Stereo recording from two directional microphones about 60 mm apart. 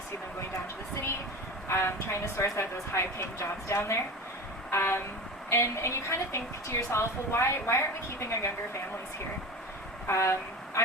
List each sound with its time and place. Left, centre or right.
1.6 s a woman's voice: left
4.7 s vehicle: left
5.5 s a woman's voice: left
10.1 s a woman's voice: left